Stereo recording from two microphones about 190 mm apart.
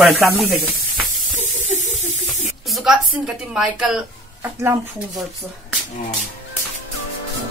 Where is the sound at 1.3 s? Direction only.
40° left (ahead or behind).